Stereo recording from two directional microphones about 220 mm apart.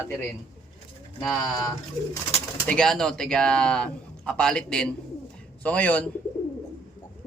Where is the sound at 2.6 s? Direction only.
5° left (ahead or behind).